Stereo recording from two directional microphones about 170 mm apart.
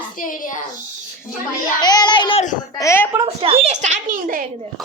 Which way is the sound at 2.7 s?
15° left (ahead or behind).